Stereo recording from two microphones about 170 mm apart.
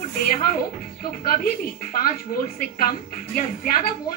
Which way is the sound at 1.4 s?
60° left (ahead or behind).